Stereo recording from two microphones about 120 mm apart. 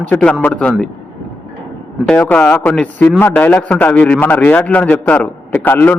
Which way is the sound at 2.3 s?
10° left (ahead or behind).